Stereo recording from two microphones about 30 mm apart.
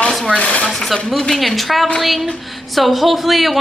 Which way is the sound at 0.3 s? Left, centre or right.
Left.